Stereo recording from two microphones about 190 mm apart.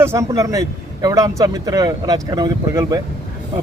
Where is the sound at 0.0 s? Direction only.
15° right (ahead or behind).